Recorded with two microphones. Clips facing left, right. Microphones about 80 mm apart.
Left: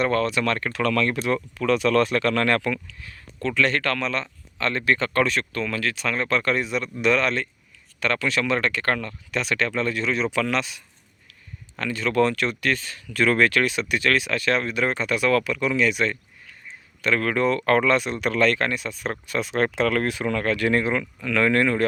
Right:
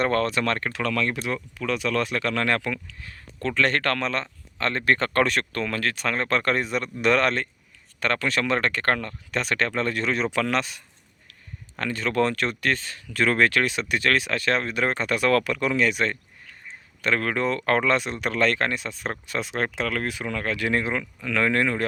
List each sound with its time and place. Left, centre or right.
0.0 s speech: right
0.7 s speech: centre
1.2 s speech: centre
3.0 s speech: right
4.9 s speech: right
16.6 s a sound: right
17.2 s speech: right
19.5 s speech: centre
20.4 s speech: centre